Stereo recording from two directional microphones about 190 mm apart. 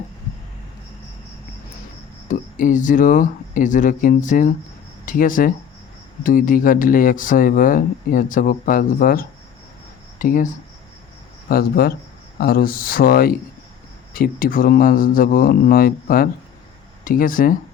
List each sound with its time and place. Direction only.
2.2 s speech: 40° left (ahead or behind)
11.4 s speech: 55° left (ahead or behind)